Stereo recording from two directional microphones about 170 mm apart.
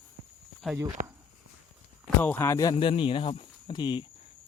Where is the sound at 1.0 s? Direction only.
50° right (ahead or behind).